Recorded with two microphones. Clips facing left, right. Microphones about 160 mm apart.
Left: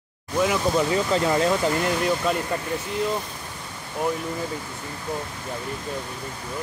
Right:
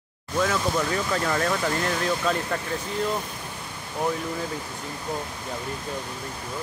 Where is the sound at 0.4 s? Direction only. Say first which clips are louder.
Left 3 dB; 15° left (ahead or behind).